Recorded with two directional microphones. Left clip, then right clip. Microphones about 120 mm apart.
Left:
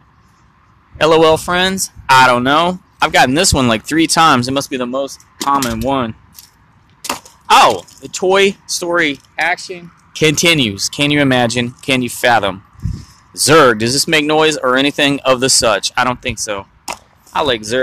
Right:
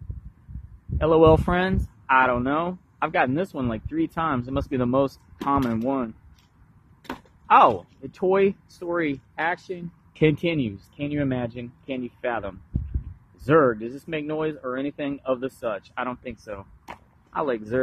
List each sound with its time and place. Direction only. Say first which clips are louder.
0.9 s speech: left 9 dB; 40° left (ahead or behind)
1.2 s speech: left 7 dB; 5° left (ahead or behind)
2.0 s speech: left 11 dB; 40° left (ahead or behind)
3.5 s speech: left 14 dB; 55° left (ahead or behind)
4.6 s speech: left 4 dB; 5° left (ahead or behind); by 6.1 s 20° left (ahead or behind)
7.4 s speech: left 7 dB; 20° left (ahead or behind)
9.3 s speech: left 10 dB; 25° right (ahead or behind)
10.4 s speech: left 14 dB; 35° left (ahead or behind)
11.1 s speech: left 14 dB; 55° left (ahead or behind)
16.2 s speech: left 15 dB; 30° left (ahead or behind)